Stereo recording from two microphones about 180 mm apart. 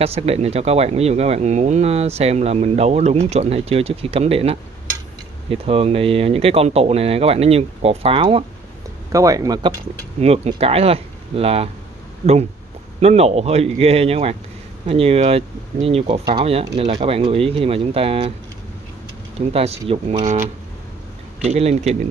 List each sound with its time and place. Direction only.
0.0 s speech: 35° right (ahead or behind)
9.1 s speech: 20° right (ahead or behind)
10.2 s speech: 35° right (ahead or behind)
19.5 s speech: 35° right (ahead or behind)